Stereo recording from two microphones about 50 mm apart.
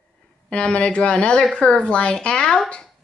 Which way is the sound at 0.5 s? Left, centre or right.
Left.